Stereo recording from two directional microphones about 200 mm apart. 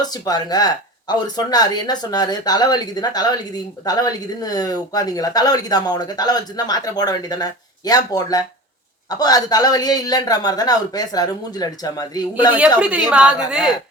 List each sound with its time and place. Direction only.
0.0 s speech: 20° left (ahead or behind)
12.5 s a woman's voice: 5° right (ahead or behind)